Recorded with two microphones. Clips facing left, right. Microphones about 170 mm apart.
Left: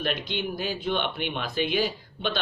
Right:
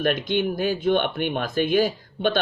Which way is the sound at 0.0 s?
50° right (ahead or behind).